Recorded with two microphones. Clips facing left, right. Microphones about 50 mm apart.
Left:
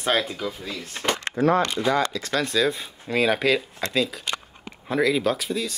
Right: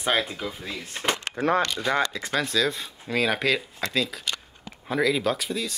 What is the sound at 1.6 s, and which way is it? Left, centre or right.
Speech, left.